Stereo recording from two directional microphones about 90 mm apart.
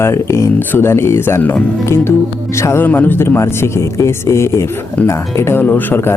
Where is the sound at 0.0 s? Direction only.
30° left (ahead or behind).